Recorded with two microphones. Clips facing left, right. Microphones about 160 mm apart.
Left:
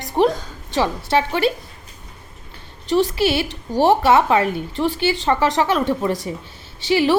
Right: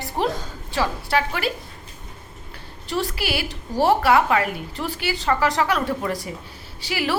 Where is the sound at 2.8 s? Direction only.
20° left (ahead or behind).